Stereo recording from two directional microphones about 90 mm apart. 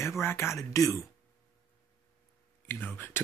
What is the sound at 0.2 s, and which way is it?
Speech, 30° left (ahead or behind).